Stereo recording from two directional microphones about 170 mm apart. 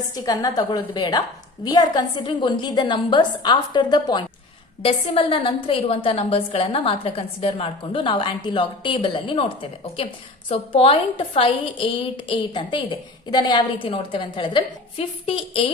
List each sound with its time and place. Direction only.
0.1 s a woman's voice: 25° left (ahead or behind)